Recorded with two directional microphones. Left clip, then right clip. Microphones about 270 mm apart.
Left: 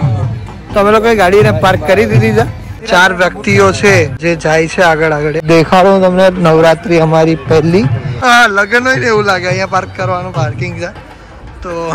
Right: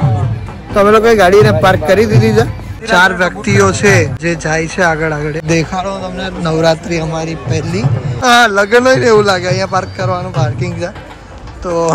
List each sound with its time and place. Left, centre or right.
0.7 s a man's voice: centre
5.9 s a man's voice: left
6.4 s a man's voice: centre